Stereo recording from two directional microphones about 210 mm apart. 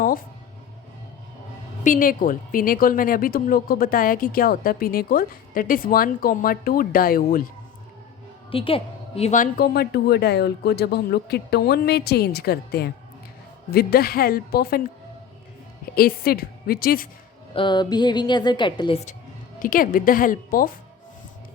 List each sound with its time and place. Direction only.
1.8 s a woman's voice: 40° left (ahead or behind)
8.4 s a woman's voice: 25° left (ahead or behind); by 14.8 s 45° left (ahead or behind)
16.0 s a woman's voice: 45° left (ahead or behind)
17.5 s a woman's voice: 25° left (ahead or behind)
19.5 s a woman's voice: 40° left (ahead or behind)